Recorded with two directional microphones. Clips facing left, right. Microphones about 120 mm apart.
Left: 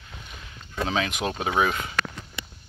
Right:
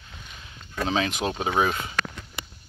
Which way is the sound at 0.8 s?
30° right (ahead or behind).